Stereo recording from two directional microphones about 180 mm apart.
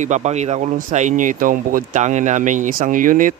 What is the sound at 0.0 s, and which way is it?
Speech, 40° right (ahead or behind).